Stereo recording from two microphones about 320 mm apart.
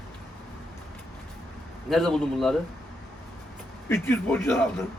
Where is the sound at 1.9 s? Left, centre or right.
Centre.